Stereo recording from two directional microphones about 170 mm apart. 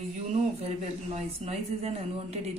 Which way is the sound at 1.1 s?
40° right (ahead or behind).